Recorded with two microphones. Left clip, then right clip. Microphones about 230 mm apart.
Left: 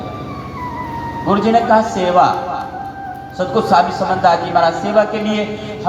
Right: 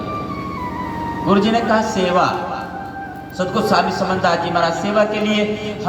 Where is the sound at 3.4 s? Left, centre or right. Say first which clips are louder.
Left 4 dB; right.